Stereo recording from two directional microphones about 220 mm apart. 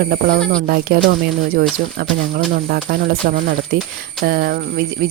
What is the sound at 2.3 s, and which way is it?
Speech, 45° right (ahead or behind).